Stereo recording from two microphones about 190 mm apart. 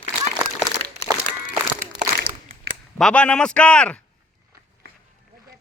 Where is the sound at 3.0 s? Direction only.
5° left (ahead or behind).